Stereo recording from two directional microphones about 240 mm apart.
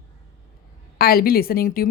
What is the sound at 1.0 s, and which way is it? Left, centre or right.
Speech, left.